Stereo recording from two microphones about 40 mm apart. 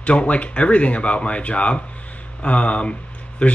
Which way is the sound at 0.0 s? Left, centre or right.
Left.